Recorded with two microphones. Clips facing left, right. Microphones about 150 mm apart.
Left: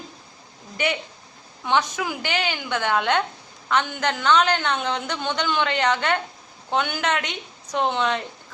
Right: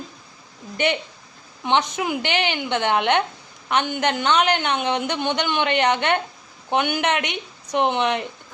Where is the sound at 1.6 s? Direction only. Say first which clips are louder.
Right 2 dB; 20° right (ahead or behind).